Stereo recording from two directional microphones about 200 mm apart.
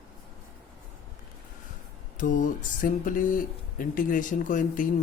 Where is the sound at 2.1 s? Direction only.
40° left (ahead or behind).